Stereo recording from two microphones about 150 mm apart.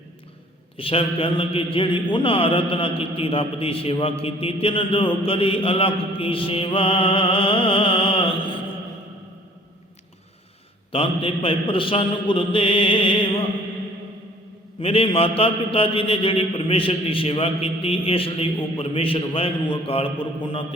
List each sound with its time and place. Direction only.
0.8 s a man's voice: 40° left (ahead or behind)
10.9 s a man's voice: 40° left (ahead or behind)
14.8 s a man's voice: 40° left (ahead or behind)